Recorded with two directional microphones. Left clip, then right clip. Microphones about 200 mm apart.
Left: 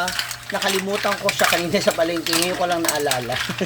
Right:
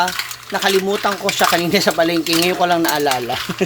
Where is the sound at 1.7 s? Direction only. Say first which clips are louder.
Right 4 dB; 35° right (ahead or behind).